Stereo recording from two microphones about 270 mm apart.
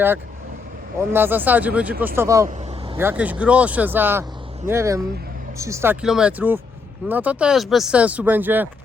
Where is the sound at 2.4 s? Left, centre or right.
Right.